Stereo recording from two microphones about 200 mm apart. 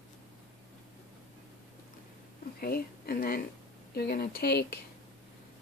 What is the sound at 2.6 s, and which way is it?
Speech, 50° left (ahead or behind).